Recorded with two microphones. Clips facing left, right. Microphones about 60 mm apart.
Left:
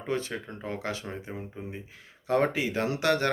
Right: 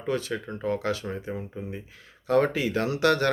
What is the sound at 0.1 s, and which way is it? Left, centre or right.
Speech, left.